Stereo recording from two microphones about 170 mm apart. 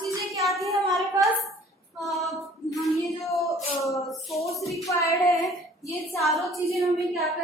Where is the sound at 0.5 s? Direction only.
20° right (ahead or behind).